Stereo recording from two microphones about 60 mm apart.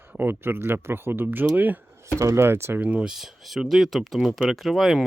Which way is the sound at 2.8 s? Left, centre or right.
Right.